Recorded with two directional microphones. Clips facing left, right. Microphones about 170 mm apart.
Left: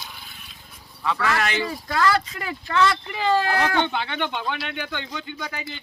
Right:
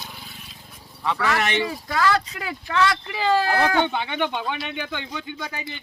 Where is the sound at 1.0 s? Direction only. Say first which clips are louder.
Even; 15° right (ahead or behind).